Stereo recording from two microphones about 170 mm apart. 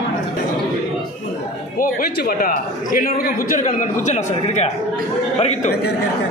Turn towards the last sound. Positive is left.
turn(degrees=40)  # may be behind; listen again after turning